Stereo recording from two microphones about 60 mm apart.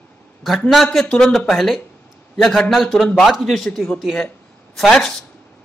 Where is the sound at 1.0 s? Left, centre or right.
Centre.